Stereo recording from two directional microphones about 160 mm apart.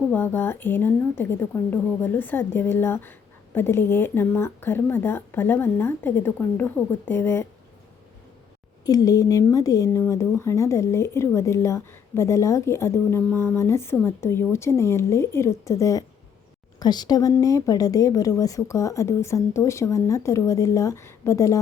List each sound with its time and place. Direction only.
0.1 s a woman's voice: 15° left (ahead or behind)
8.9 s a woman's voice: 20° left (ahead or behind)